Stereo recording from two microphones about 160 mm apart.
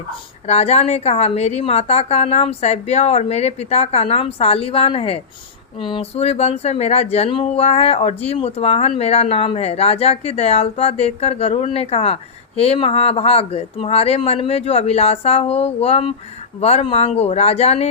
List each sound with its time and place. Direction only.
0.4 s speech: 40° left (ahead or behind)